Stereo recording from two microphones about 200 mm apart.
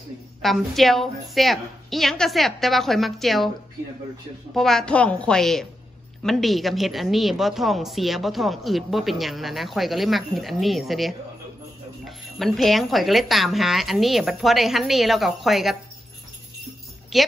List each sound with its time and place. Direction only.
0.4 s a woman's voice: centre (ahead or behind)
4.6 s a woman's voice: centre (ahead or behind)
17.1 s a woman's voice: centre (ahead or behind)